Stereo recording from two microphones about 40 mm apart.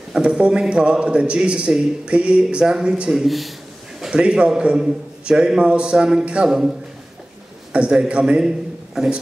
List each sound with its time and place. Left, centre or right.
0.1 s a man's voice: centre
3.1 s a man's voice: centre
4.1 s a man's voice: right
7.7 s a man's voice: right